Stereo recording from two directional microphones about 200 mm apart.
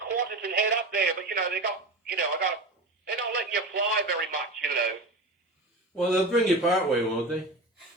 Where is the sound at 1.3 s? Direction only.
50° right (ahead or behind).